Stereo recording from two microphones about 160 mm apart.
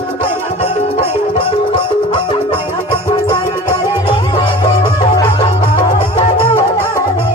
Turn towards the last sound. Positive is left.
turn(degrees=30)  # may be behind; listen again after turning